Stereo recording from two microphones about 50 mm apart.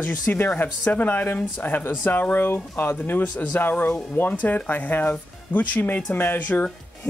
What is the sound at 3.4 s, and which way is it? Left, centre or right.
Speech, left.